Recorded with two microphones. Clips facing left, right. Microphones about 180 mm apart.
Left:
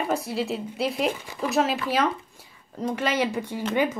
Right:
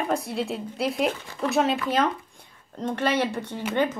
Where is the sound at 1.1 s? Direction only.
10° left (ahead or behind).